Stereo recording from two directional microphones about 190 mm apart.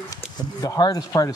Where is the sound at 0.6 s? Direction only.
20° left (ahead or behind).